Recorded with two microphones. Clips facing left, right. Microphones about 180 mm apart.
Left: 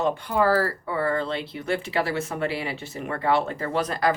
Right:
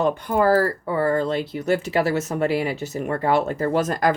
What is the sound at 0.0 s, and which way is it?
Speech, 50° right (ahead or behind).